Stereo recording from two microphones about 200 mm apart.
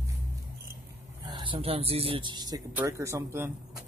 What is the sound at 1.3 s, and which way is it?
Speech, 25° right (ahead or behind).